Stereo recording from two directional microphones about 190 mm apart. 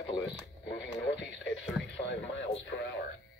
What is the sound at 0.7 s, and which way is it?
Speech, 80° left.